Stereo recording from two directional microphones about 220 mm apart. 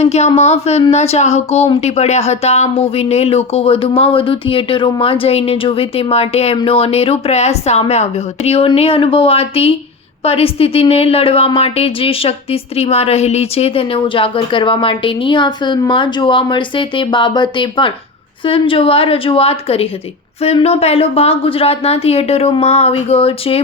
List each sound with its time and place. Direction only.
0.0 s speech: 30° left (ahead or behind)